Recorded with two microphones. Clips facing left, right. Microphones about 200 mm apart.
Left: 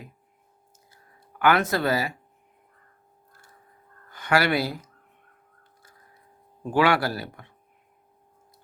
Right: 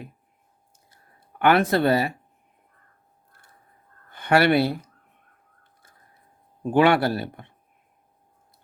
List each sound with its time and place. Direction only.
1.4 s speech: 30° right (ahead or behind)
4.1 s speech: 25° right (ahead or behind)
6.7 s speech: 25° right (ahead or behind)